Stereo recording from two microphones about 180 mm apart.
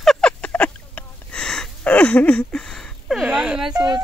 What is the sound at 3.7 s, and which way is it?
Speech, 20° right (ahead or behind).